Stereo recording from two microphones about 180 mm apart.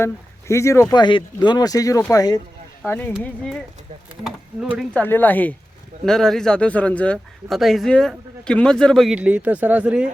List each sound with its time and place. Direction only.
0.0 s speech: 15° left (ahead or behind)
2.8 s speech: 10° left (ahead or behind)
4.9 s speech: 10° left (ahead or behind); by 10.1 s 5° right (ahead or behind)